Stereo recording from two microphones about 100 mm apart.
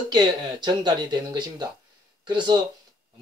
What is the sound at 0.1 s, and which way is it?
Speech, 50° right (ahead or behind).